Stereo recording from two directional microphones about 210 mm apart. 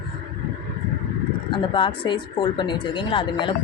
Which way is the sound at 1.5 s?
25° left (ahead or behind).